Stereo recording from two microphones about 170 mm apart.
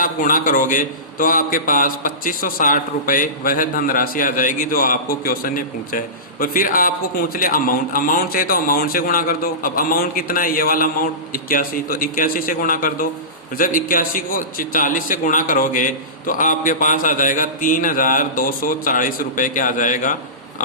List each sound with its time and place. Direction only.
0.0 s a man's voice: 50° left (ahead or behind)